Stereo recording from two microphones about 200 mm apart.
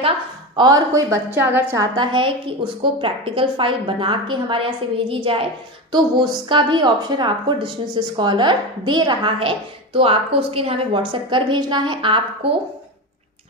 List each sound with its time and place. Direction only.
0.6 s a woman's voice: 20° right (ahead or behind)
2.0 s a woman's voice: 25° right (ahead or behind)